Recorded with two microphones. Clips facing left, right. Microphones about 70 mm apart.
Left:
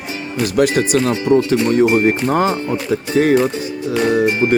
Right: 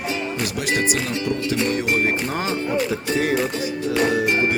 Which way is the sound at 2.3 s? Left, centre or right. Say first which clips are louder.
Left 10 dB; left.